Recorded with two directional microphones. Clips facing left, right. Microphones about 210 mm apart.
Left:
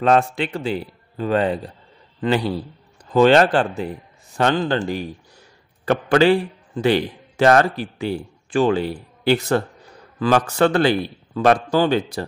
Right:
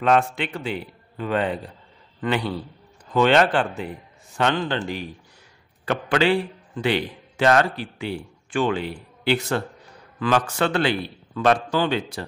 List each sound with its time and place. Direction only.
0.0 s a man's voice: 35° left (ahead or behind)